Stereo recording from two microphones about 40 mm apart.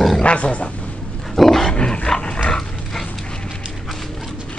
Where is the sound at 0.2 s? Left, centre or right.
Left.